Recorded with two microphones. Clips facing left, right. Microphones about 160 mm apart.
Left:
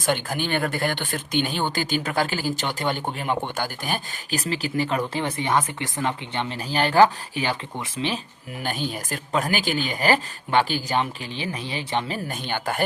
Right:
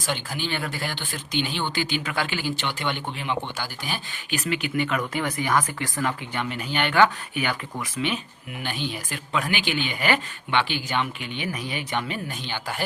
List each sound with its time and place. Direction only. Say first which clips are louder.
0.0 s speech: left 5 dB; 50° left (ahead or behind)
4.4 s speech: even; 35° left (ahead or behind)
8.6 s speech: left 2 dB; 45° left (ahead or behind)